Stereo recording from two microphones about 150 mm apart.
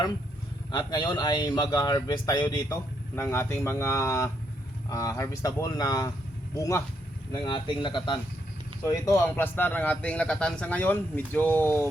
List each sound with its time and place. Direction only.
0.7 s speech: 30° left (ahead or behind)
7.3 s speech: 30° left (ahead or behind)
8.8 s a man's voice: 20° left (ahead or behind)